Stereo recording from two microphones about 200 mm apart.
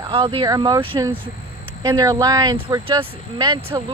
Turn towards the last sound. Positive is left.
turn(degrees=-15)  # may be behind; listen again after turning